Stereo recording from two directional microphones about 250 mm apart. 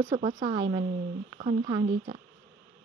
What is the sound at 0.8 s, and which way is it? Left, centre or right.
Speech, right.